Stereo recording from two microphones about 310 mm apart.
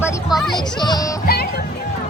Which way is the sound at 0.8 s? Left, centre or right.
Centre.